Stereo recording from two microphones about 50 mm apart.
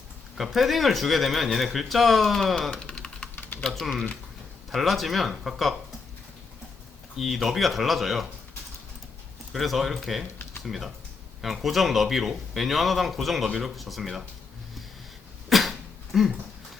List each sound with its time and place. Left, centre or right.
0.3 s speech: centre
2.8 s typing: centre
4.7 s speech: centre
7.2 s speech: centre
9.5 s speech: centre
15.4 s cough: centre
16.1 s speech: centre